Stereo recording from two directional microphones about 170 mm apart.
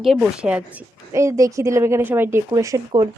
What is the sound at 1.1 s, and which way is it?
A woman's voice, 20° right (ahead or behind).